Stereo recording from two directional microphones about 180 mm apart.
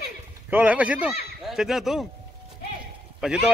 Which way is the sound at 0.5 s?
10° right (ahead or behind).